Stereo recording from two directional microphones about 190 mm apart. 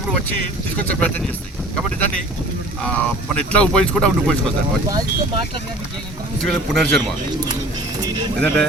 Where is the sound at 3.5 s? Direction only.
5° left (ahead or behind).